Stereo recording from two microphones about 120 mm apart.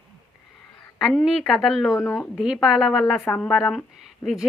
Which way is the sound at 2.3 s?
Centre (ahead or behind).